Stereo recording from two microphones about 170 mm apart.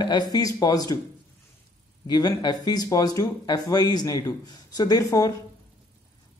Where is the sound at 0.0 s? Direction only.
25° left (ahead or behind).